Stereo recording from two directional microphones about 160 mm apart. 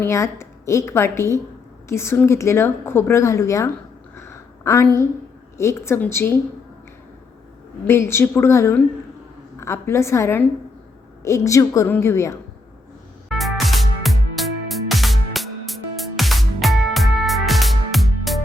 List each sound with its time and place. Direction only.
0.0 s a woman's voice: 15° left (ahead or behind)
4.1 s a sound: 15° left (ahead or behind)
5.5 s a woman's voice: 15° left (ahead or behind)
7.9 s a woman's voice: 15° left (ahead or behind)
13.2 s music: centre (ahead or behind)